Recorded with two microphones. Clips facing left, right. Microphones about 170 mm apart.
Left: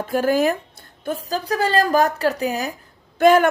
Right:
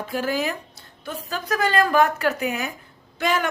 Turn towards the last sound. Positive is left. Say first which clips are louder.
# left 10 dB
turn(degrees=50)  # may be behind; listen again after turning